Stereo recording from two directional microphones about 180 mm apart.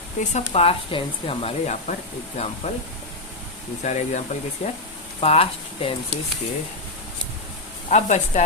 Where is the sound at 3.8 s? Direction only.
40° left (ahead or behind).